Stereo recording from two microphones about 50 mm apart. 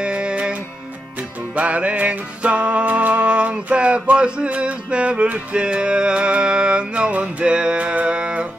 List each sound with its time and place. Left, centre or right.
0.0 s music: centre